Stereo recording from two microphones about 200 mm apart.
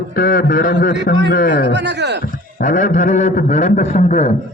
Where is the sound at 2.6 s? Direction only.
40° left (ahead or behind).